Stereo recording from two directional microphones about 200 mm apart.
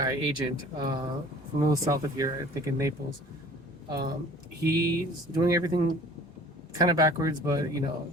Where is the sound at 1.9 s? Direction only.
20° right (ahead or behind).